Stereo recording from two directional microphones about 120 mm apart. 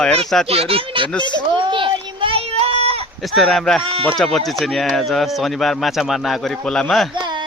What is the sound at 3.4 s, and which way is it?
Speech, 5° left (ahead or behind).